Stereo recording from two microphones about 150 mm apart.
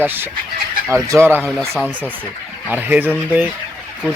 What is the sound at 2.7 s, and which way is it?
Speech, 10° right (ahead or behind).